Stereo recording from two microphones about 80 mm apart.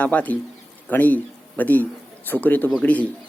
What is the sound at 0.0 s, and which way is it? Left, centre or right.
A man's voice, centre.